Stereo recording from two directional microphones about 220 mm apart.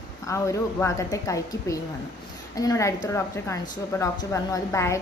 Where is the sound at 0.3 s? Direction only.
15° left (ahead or behind).